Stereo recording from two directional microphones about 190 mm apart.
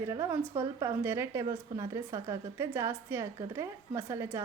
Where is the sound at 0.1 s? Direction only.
15° right (ahead or behind).